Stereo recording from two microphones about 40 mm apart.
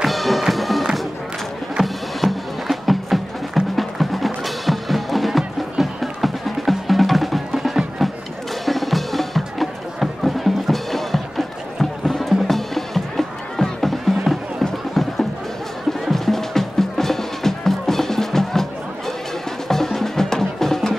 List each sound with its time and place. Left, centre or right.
0.0 s music: centre
15.0 s a sound: centre
15.9 s music: centre